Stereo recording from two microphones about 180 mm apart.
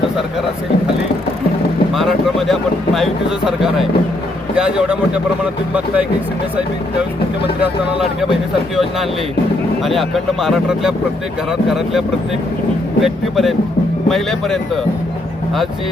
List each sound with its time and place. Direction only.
2.5 s speech: centre (ahead or behind)
8.7 s speech: centre (ahead or behind)
13.0 s speech: centre (ahead or behind)